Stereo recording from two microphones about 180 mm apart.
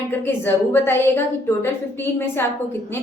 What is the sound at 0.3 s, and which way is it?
Speech, 10° left (ahead or behind).